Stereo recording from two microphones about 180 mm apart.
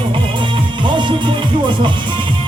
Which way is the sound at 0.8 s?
25° right (ahead or behind).